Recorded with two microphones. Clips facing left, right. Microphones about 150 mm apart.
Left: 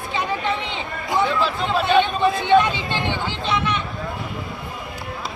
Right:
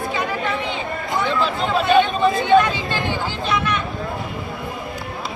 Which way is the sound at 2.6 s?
20° left (ahead or behind).